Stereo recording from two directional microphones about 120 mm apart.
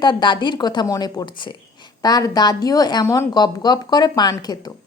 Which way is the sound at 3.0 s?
20° left (ahead or behind).